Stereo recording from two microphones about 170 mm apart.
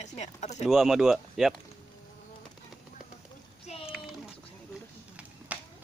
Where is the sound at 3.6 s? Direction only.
35° left (ahead or behind).